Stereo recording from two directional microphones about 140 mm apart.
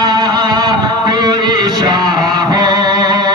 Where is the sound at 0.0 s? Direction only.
30° right (ahead or behind).